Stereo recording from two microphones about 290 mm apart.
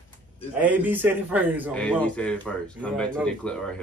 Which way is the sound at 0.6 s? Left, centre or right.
Centre.